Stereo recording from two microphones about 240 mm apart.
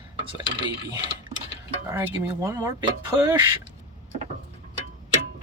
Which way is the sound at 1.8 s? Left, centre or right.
Centre.